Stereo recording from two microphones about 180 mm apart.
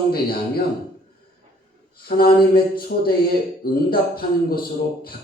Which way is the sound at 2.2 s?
55° left (ahead or behind).